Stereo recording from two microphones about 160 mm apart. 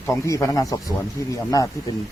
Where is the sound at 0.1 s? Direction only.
20° left (ahead or behind).